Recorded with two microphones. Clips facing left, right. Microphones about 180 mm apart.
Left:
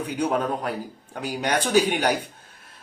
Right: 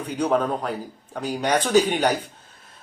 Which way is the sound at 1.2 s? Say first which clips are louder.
Right 2 dB; 10° left (ahead or behind).